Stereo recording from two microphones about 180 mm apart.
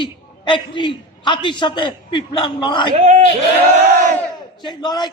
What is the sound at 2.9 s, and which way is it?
Speech, 40° right (ahead or behind).